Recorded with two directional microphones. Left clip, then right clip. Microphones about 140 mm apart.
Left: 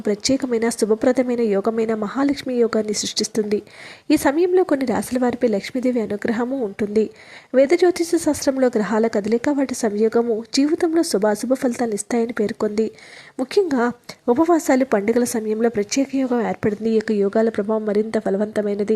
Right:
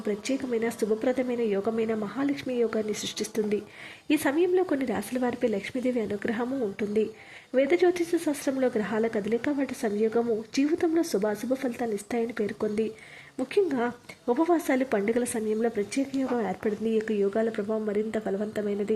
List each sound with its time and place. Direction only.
0.0 s speech: 35° left (ahead or behind)